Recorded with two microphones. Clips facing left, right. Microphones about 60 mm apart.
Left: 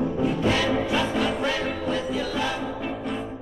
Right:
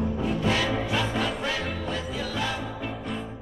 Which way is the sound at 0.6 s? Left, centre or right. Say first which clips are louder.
Left 3 dB; centre.